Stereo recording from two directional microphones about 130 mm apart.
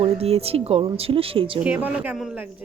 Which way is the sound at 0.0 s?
50° right (ahead or behind).